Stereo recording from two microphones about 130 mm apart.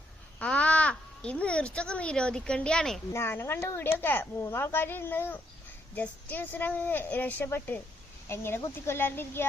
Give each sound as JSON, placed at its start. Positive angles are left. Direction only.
{"t": 0.3, "sound": "speech", "side_deg": 10}
{"t": 3.1, "sound": "speech", "side_deg": 20}